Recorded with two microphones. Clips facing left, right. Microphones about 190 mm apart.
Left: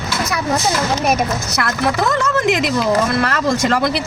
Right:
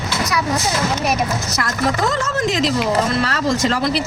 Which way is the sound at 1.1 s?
65° left (ahead or behind).